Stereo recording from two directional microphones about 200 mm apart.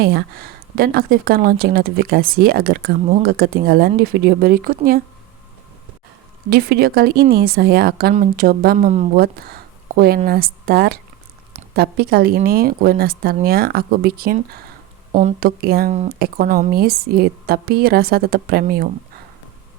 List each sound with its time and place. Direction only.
0.0 s speech: 50° right (ahead or behind)
6.5 s speech: 50° right (ahead or behind)
15.4 s speech: 50° right (ahead or behind)
15.9 s speech: 35° right (ahead or behind)
16.1 s speech: 45° right (ahead or behind)